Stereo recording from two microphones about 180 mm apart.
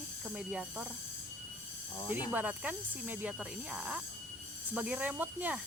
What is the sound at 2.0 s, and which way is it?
Speech, 25° left (ahead or behind).